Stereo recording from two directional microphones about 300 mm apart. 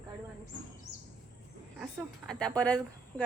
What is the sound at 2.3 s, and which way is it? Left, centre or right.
Speech, centre.